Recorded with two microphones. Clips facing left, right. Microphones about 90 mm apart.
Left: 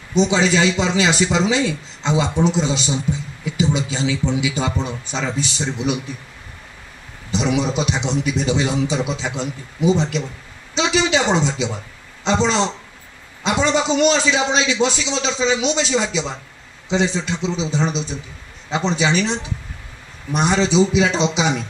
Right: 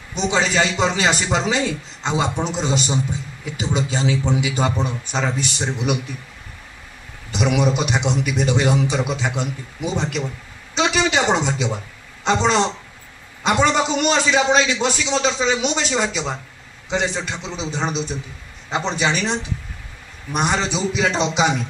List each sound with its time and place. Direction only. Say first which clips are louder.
0.3 s a man's voice: left 2 dB; 45° right (ahead or behind)
7.2 s a man's voice: right 1 dB; 55° right (ahead or behind)
20.3 s a man's voice: left 5 dB; 50° right (ahead or behind)